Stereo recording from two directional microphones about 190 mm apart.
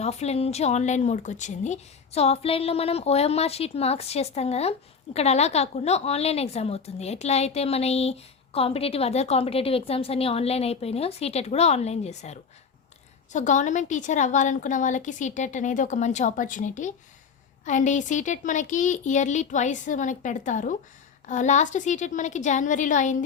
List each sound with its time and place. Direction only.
0.0 s a woman's voice: 35° left (ahead or behind)